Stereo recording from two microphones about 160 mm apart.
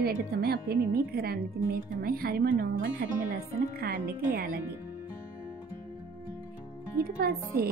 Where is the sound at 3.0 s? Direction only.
75° right (ahead or behind).